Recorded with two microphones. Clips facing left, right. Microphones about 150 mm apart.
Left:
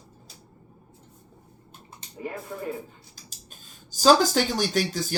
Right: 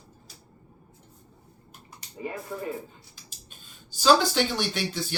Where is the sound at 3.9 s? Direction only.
40° left (ahead or behind).